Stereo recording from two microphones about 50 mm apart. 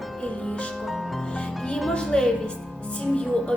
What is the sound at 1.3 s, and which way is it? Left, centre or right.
A woman's voice, left.